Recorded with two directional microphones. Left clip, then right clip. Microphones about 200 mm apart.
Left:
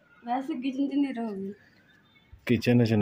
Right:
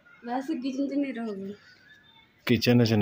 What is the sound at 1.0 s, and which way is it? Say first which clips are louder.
Speech: left 1 dB; 60° left (ahead or behind).